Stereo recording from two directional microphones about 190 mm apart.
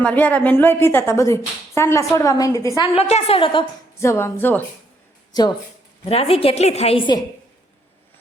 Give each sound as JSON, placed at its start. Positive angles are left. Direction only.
{"t": 0.0, "sound": "a woman's voice", "side_deg": 5}
{"t": 2.9, "sound": "a woman's voice", "side_deg": 35}
{"t": 4.0, "sound": "a woman's voice", "side_deg": 15}
{"t": 5.3, "sound": "a woman's voice", "side_deg": 20}